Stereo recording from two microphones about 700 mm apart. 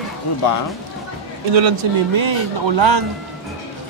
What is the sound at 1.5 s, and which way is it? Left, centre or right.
A man's voice, right.